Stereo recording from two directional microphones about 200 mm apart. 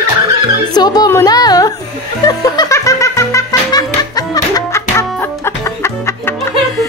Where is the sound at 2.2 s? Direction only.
20° left (ahead or behind).